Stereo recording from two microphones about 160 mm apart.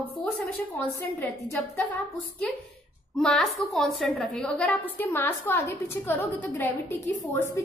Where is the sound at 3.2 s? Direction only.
5° left (ahead or behind).